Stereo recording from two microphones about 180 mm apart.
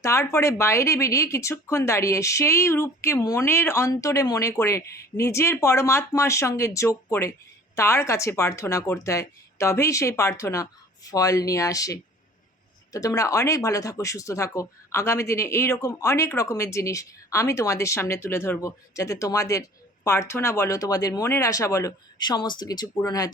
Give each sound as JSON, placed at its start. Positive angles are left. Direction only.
{"t": 0.0, "sound": "speech", "side_deg": 15}